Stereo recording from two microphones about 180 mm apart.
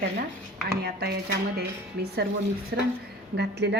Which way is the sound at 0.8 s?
60° right (ahead or behind).